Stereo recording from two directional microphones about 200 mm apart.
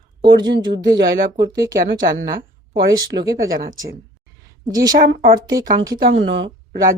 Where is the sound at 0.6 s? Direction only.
20° right (ahead or behind).